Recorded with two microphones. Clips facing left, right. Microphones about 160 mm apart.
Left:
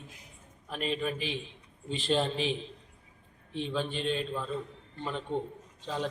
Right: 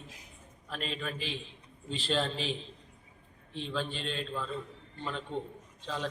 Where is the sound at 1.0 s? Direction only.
15° left (ahead or behind).